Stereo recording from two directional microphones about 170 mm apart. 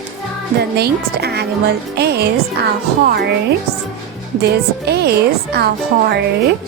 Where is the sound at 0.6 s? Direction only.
70° right (ahead or behind).